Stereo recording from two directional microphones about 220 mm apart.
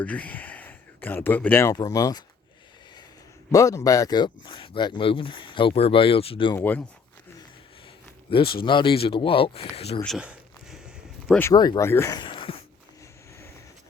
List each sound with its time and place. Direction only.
0.0 s speech: 5° left (ahead or behind)
3.5 s speech: 15° left (ahead or behind)
8.3 s speech: 25° left (ahead or behind)
10.0 s a sound: centre (ahead or behind)
11.3 s speech: 15° left (ahead or behind)